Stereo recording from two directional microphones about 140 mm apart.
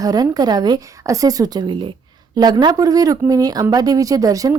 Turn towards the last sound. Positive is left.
turn(degrees=-25)  # may be behind; listen again after turning